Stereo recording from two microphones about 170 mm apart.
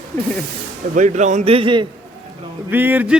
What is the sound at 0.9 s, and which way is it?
Speech, 45° right (ahead or behind).